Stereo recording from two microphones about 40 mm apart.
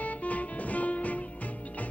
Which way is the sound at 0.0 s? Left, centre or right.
Left.